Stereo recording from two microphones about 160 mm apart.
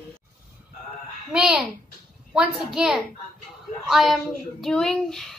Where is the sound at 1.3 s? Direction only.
5° right (ahead or behind).